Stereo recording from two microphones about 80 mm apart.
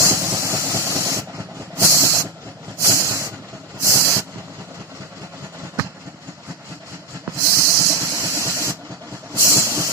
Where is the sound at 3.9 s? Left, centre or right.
Right.